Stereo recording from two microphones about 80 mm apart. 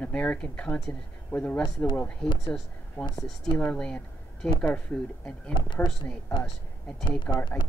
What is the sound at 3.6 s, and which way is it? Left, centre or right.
Speech, centre.